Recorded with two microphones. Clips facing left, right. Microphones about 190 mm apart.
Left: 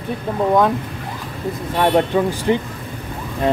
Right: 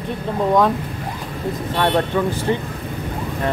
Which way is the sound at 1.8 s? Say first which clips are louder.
Left 3 dB; 10° left (ahead or behind).